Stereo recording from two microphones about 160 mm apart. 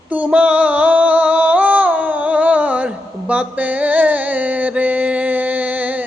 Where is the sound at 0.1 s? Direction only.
10° right (ahead or behind).